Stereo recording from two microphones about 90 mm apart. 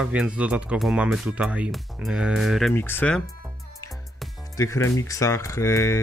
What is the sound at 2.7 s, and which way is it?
Speech, 25° left (ahead or behind).